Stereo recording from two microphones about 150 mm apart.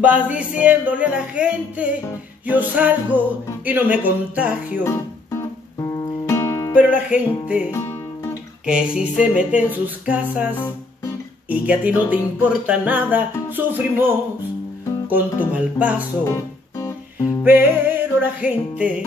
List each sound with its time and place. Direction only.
0.0 s music: 10° right (ahead or behind)
5.8 s music: 20° left (ahead or behind)
6.7 s music: 10° right (ahead or behind)
7.7 s music: 15° left (ahead or behind)
8.6 s music: 5° right (ahead or behind)
15.5 s music: 10° right (ahead or behind)
16.3 s music: 20° left (ahead or behind)
17.4 s music: 15° right (ahead or behind)